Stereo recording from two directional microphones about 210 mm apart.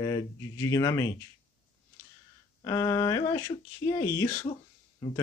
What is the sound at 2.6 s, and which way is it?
Speech, 15° left (ahead or behind).